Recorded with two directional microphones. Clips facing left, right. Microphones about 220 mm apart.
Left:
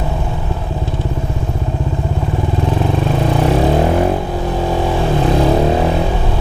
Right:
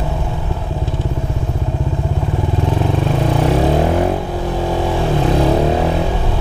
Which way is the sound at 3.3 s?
20° left (ahead or behind).